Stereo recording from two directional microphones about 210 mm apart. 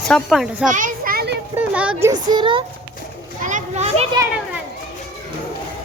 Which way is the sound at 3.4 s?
35° right (ahead or behind).